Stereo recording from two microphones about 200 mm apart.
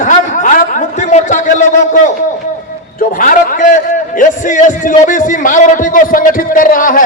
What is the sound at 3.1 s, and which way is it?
A man's voice, 45° left (ahead or behind).